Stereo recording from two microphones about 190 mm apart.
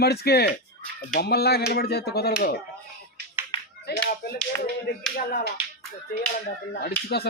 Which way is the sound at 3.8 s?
55° left (ahead or behind).